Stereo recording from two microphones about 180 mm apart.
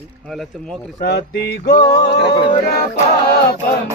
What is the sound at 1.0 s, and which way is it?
Music, 65° left (ahead or behind).